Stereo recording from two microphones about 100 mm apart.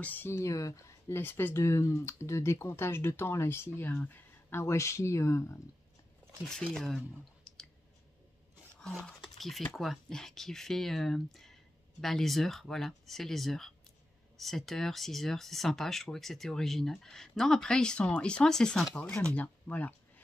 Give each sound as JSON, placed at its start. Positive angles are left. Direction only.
{"t": 0.0, "sound": "speech", "side_deg": 20}
{"t": 0.4, "sound": "speech", "side_deg": 35}
{"t": 6.4, "sound": "speech", "side_deg": 5}
{"t": 7.5, "sound": "clicking", "side_deg": 5}
{"t": 9.2, "sound": "speech", "side_deg": 0}